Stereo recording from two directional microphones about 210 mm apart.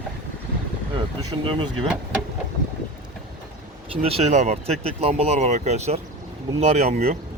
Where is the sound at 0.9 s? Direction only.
20° right (ahead or behind).